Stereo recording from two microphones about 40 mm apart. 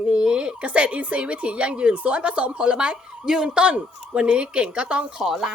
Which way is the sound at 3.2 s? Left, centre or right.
Centre.